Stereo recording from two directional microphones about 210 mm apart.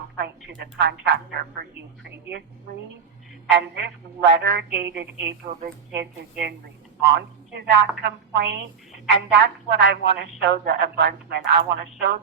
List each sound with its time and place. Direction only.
0.2 s a woman's voice: 55° right (ahead or behind)
3.5 s a woman's voice: 55° right (ahead or behind)